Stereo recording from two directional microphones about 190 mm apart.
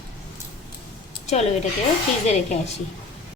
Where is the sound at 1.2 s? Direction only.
35° left (ahead or behind).